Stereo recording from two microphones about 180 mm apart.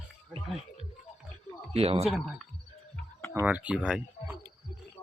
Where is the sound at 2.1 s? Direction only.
Centre (ahead or behind).